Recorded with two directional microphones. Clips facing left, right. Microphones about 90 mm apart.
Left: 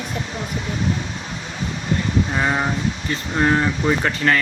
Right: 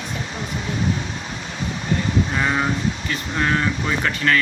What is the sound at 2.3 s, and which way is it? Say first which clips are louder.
Speech: even; 15° left (ahead or behind).